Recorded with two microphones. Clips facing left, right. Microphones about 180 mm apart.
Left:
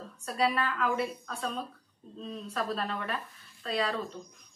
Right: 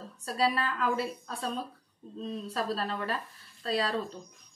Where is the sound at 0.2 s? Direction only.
30° right (ahead or behind).